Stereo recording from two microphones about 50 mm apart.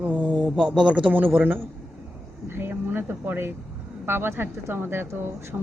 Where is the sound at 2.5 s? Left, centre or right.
Right.